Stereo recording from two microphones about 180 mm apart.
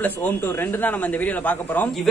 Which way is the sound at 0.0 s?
10° left (ahead or behind).